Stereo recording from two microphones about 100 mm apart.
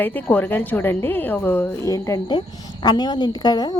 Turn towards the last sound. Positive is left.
turn(degrees=40)  # may be behind; listen again after turning